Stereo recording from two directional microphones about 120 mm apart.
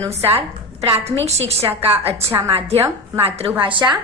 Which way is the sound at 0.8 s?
55° right (ahead or behind).